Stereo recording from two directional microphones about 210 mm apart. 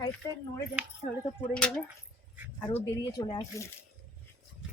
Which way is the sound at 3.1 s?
20° left (ahead or behind).